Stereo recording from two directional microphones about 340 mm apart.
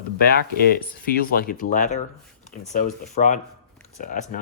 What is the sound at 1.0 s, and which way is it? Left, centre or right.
Speech, left.